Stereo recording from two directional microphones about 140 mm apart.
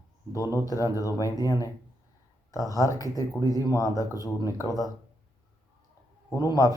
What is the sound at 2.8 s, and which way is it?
Speech, 25° left (ahead or behind).